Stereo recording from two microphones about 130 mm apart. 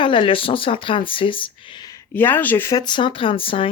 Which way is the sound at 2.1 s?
15° left (ahead or behind).